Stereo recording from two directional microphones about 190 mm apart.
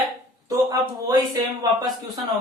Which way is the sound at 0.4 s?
20° right (ahead or behind).